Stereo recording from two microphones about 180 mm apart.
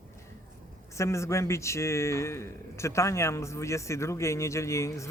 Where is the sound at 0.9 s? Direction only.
15° left (ahead or behind).